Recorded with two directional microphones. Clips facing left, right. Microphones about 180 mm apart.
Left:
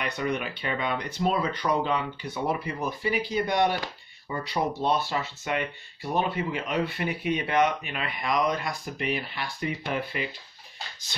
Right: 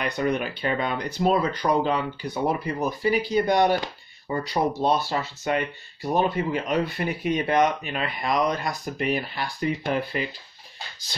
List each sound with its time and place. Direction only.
0.0 s speech: 40° right (ahead or behind)